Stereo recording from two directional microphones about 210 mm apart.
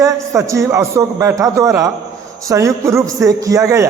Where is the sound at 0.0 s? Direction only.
15° right (ahead or behind).